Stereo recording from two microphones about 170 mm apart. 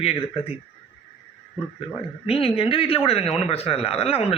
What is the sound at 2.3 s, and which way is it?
A man's voice, 35° left (ahead or behind).